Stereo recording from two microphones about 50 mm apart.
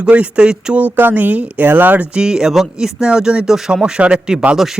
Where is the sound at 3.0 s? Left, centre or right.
Centre.